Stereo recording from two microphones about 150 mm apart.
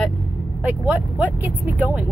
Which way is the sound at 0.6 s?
10° right (ahead or behind).